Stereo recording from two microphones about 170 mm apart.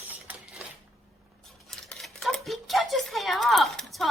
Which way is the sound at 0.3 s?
10° right (ahead or behind).